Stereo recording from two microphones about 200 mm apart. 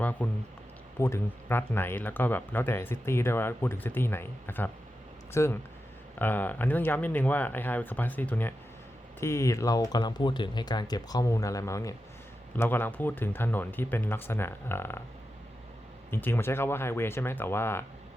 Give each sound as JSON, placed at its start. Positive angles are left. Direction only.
{"t": 0.0, "sound": "speech", "side_deg": 10}
{"t": 16.0, "sound": "speech", "side_deg": 10}